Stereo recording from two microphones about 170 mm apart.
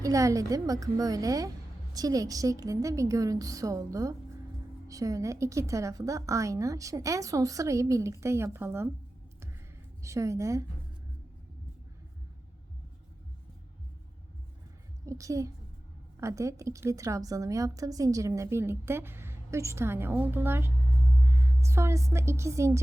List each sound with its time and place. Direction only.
0.0 s a woman's voice: 20° right (ahead or behind)
10.0 s a woman's voice: 15° right (ahead or behind)
15.0 s a woman's voice: 20° right (ahead or behind)